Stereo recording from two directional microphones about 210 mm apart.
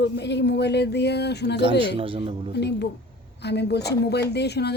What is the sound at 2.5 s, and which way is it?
Speech, 55° left (ahead or behind).